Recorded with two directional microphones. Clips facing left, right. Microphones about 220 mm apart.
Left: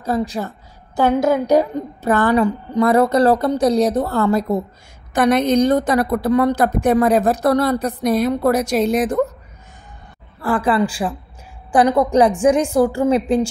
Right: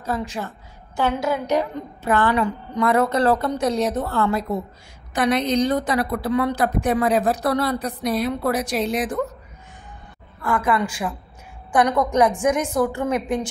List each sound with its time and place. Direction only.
0.0 s a woman's voice: 35° left (ahead or behind)
10.4 s a woman's voice: 30° left (ahead or behind)